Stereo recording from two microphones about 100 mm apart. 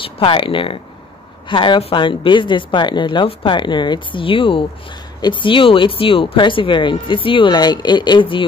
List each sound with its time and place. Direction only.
0.0 s a woman's voice: 60° left (ahead or behind)